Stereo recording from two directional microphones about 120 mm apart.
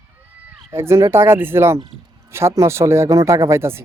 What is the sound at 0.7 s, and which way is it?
Speech, 20° right (ahead or behind).